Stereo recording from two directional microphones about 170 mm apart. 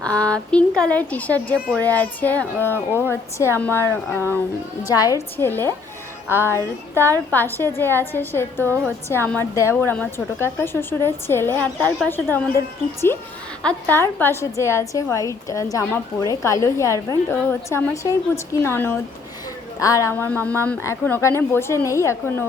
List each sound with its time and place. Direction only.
0.0 s a sound: 5° left (ahead or behind)
1.7 s a woman's voice: 10° left (ahead or behind)
8.6 s a woman's voice: 15° right (ahead or behind)
9.0 s a woman's voice: 10° left (ahead or behind)
13.6 s a woman's voice: 10° left (ahead or behind)